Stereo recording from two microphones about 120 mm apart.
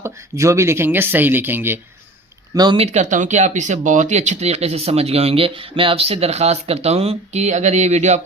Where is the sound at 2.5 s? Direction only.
35° right (ahead or behind).